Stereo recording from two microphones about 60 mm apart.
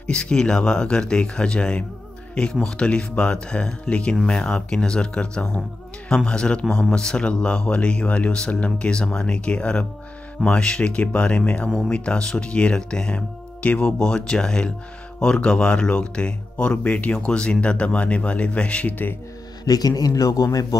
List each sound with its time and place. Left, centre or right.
0.0 s speech: centre
19.6 s speech: left
20.0 s speech: left